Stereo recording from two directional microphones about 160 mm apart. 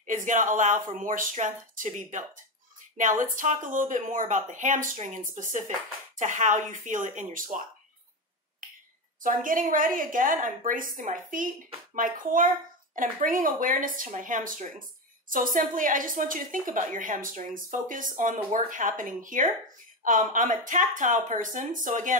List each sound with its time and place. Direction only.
0.0 s speech: 50° right (ahead or behind)
9.2 s speech: 60° right (ahead or behind)